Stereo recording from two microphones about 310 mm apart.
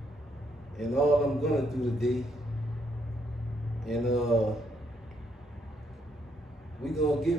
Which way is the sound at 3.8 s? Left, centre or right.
Centre.